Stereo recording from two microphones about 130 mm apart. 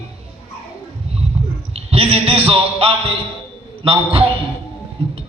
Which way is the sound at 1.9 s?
45° right (ahead or behind).